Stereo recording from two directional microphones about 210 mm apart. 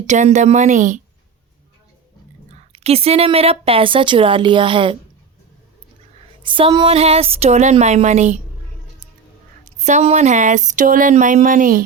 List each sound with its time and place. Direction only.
0.1 s speech: 35° right (ahead or behind)
2.5 s a woman's voice: 30° right (ahead or behind)
6.4 s a woman's voice: 25° right (ahead or behind)
9.6 s speech: 35° right (ahead or behind)